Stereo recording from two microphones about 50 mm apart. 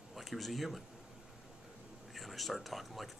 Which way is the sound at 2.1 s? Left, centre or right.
Centre.